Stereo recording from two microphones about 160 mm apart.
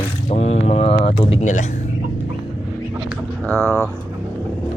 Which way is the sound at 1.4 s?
50° left (ahead or behind).